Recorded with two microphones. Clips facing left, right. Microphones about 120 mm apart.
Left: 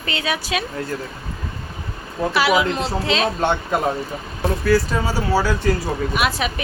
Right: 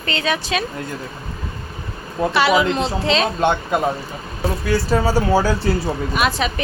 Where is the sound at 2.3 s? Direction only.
5° left (ahead or behind).